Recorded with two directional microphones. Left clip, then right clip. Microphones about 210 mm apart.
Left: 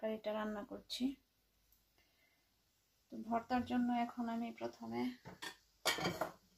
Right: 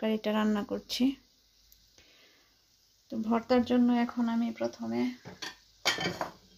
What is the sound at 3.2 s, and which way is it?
Speech, 45° right (ahead or behind).